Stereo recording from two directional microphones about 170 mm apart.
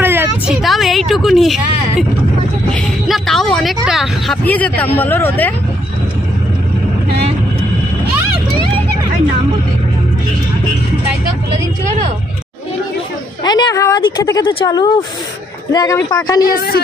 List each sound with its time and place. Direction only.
0.0 s a sound: 10° right (ahead or behind)
0.6 s a woman's voice: centre (ahead or behind)
2.7 s vehicle: centre (ahead or behind)
4.5 s speech: 10° left (ahead or behind)
13.4 s a woman's voice: 25° left (ahead or behind)
16.4 s speech: 65° left (ahead or behind)